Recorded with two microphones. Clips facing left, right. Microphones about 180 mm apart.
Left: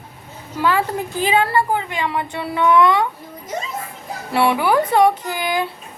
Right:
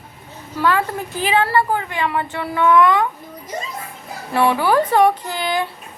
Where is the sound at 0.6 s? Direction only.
15° left (ahead or behind).